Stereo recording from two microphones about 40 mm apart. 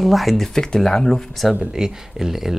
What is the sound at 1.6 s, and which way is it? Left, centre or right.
Speech, centre.